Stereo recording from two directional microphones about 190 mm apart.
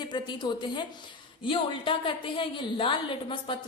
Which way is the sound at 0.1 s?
25° left (ahead or behind).